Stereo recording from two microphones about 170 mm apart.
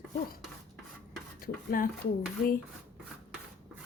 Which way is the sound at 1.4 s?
55° left (ahead or behind).